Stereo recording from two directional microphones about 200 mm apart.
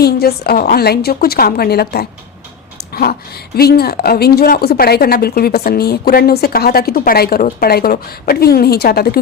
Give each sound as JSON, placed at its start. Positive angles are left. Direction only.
{"t": 0.0, "sound": "speech", "side_deg": 50}